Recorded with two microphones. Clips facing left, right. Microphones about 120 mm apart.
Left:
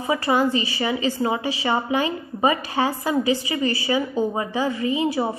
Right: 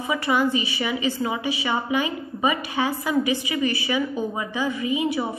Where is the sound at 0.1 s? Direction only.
35° left (ahead or behind).